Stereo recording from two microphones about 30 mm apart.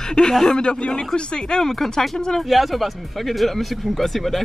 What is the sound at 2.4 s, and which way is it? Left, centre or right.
Speech, centre.